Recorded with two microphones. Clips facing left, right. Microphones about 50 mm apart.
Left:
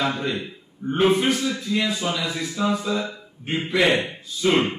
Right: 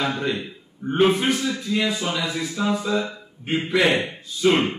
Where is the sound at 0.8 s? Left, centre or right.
Centre.